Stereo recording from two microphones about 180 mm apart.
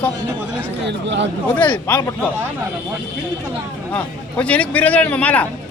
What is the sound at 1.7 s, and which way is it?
Speech, 10° left (ahead or behind).